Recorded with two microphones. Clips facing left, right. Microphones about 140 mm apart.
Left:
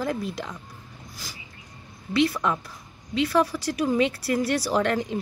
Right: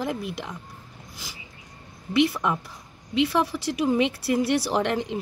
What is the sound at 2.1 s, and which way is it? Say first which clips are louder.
Speech: right 1 dB; 20° right (ahead or behind).